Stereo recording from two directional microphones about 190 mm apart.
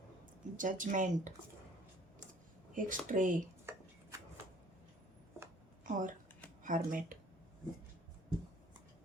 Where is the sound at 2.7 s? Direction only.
45° right (ahead or behind).